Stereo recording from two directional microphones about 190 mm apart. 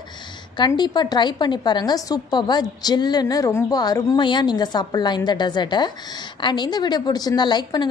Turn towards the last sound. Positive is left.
turn(degrees=25)  # may be behind; listen again after turning